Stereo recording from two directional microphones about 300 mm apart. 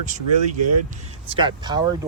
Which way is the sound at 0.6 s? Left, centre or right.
Right.